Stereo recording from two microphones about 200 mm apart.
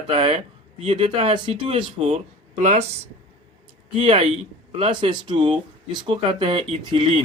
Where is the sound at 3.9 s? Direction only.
30° right (ahead or behind).